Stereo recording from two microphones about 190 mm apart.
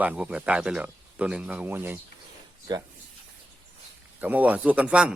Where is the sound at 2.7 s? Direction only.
20° right (ahead or behind).